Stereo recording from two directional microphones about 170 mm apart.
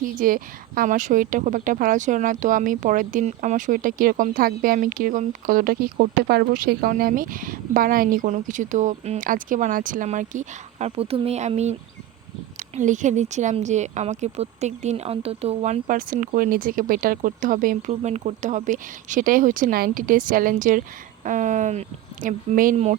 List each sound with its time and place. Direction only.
0.0 s speech: 55° right (ahead or behind)